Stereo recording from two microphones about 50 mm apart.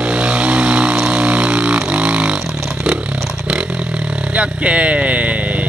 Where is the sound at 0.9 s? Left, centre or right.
Centre.